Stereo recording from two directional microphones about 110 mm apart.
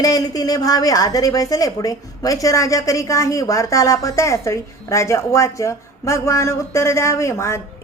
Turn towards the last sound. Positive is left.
turn(degrees=25)  # may be behind; listen again after turning